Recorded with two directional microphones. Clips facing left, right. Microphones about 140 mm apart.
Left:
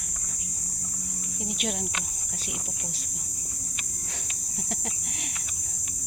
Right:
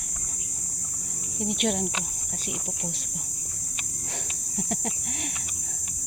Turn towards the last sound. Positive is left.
turn(degrees=-50)  # may be behind; listen again after turning